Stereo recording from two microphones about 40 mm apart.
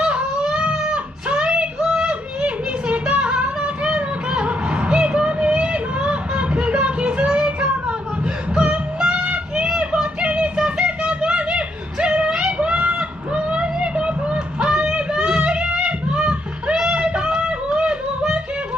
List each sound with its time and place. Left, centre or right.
0.0 s a sound: right
8.5 s music: right
12.5 s fowl: right